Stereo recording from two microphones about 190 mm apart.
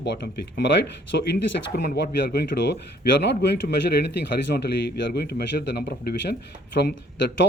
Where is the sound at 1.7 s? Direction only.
55° left (ahead or behind).